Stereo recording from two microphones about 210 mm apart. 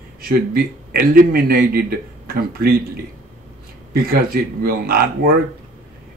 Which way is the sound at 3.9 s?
45° right (ahead or behind).